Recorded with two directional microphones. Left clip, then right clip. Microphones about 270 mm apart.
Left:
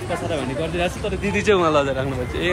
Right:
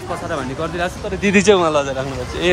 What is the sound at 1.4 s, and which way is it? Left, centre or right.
Speech, centre.